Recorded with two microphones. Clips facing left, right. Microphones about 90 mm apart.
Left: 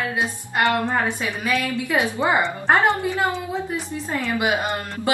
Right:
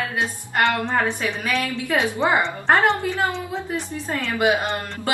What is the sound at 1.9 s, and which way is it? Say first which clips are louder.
A woman's voice: right 1 dB; 5° left (ahead or behind).